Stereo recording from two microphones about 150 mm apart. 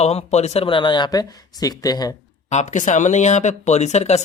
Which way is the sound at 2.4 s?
50° left (ahead or behind).